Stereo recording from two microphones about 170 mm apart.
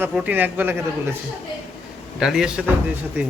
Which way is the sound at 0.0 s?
5° right (ahead or behind).